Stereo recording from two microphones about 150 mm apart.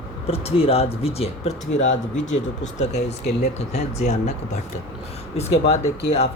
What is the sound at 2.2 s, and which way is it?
Speech, 55° left (ahead or behind).